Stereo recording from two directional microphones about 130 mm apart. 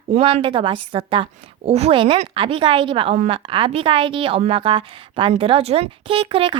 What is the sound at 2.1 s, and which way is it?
Speech, 55° right (ahead or behind).